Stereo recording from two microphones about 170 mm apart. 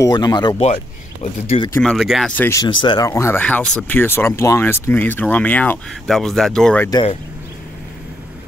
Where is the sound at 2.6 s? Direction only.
30° left (ahead or behind).